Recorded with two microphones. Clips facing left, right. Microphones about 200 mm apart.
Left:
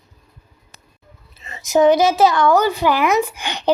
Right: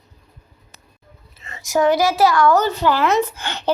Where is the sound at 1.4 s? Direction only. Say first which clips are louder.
Left 4 dB; 20° left (ahead or behind).